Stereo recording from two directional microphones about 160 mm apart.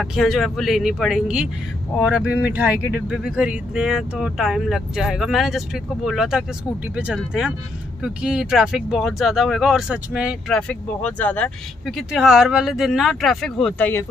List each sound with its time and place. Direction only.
0.0 s speech: centre (ahead or behind)
10.5 s speech: 10° left (ahead or behind)
12.1 s speech: 5° right (ahead or behind)